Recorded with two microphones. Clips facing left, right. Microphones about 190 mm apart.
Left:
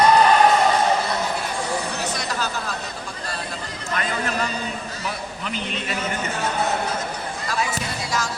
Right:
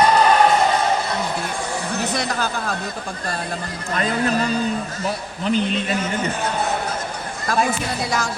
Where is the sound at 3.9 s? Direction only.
35° right (ahead or behind).